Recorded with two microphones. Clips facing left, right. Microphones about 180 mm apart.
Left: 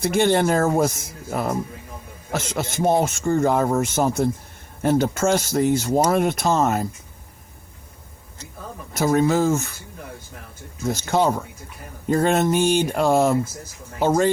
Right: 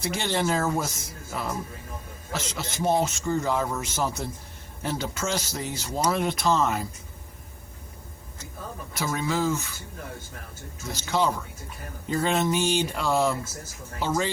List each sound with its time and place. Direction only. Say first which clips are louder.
0.0 s speech: left 9 dB; 55° left (ahead or behind)
8.9 s speech: left 10 dB; 45° left (ahead or behind)
10.8 s speech: left 6 dB; 50° left (ahead or behind)